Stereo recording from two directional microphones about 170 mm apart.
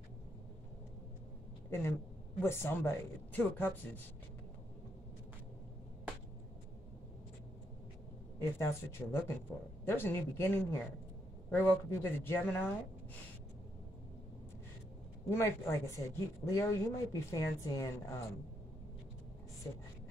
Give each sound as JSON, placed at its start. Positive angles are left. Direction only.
{"t": 1.7, "sound": "speech", "side_deg": 15}
{"t": 8.4, "sound": "speech", "side_deg": 15}
{"t": 15.2, "sound": "speech", "side_deg": 15}